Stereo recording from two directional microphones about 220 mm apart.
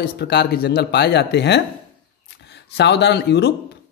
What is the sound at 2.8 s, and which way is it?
Speech, 50° left (ahead or behind).